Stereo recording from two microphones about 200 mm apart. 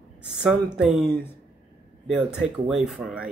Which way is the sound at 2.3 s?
Centre (ahead or behind).